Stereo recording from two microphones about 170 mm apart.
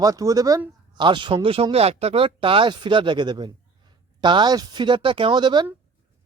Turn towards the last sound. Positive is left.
turn(degrees=-25)  # may be behind; listen again after turning